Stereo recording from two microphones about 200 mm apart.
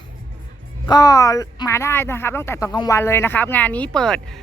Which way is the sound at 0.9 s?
15° left (ahead or behind).